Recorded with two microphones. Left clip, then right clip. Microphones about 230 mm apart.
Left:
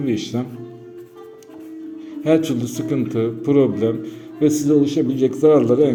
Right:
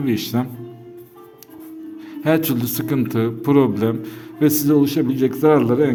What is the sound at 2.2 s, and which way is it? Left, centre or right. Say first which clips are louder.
A man's voice: left 1 dB; right.